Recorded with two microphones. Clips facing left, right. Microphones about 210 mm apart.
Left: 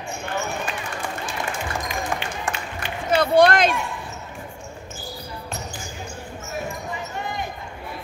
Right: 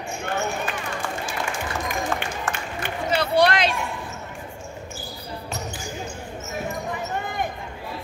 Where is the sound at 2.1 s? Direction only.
15° left (ahead or behind).